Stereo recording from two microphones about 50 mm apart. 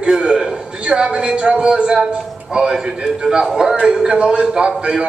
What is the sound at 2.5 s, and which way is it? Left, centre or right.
A man's voice, centre.